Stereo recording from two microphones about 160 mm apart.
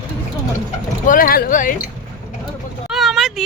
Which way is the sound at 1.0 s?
60° left (ahead or behind).